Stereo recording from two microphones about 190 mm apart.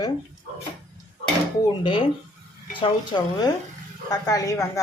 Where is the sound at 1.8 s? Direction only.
25° left (ahead or behind).